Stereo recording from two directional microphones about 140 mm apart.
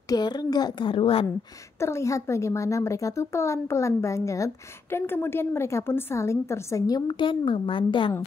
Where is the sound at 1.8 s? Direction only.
20° left (ahead or behind).